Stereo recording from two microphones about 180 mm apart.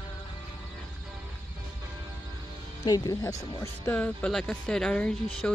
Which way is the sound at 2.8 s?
20° left (ahead or behind).